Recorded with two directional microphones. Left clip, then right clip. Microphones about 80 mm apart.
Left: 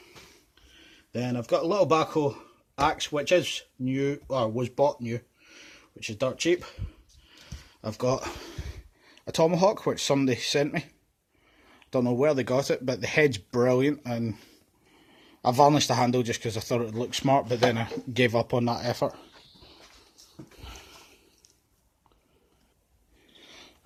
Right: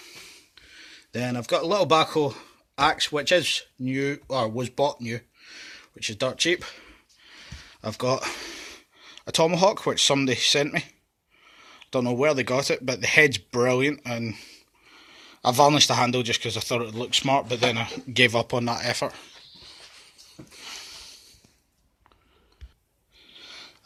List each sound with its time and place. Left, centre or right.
0.8 s a man's voice: centre
6.5 s a sound: centre
8.1 s speech: left
13.5 s speech: left
14.8 s a sound: left
15.9 s speech: left
17.0 s speech: left
18.1 s speech: left